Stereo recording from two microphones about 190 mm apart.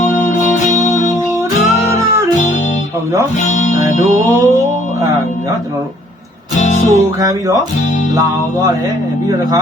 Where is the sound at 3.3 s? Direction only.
40° left (ahead or behind).